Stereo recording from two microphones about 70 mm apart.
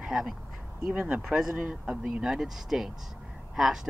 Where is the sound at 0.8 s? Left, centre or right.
Right.